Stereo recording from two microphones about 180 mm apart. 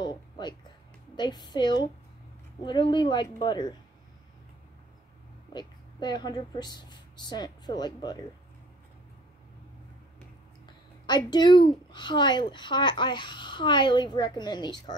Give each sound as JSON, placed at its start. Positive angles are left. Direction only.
{"t": 0.0, "sound": "a sound", "side_deg": 25}
{"t": 1.1, "sound": "a child's voice", "side_deg": 25}
{"t": 5.5, "sound": "a child's voice", "side_deg": 25}
{"t": 11.1, "sound": "a child's voice", "side_deg": 25}